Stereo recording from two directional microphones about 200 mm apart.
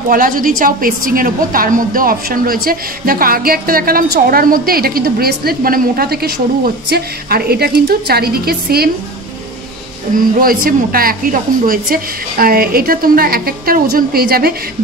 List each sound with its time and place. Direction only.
0.1 s a woman's voice: 45° right (ahead or behind)
10.4 s a woman's voice: 45° right (ahead or behind)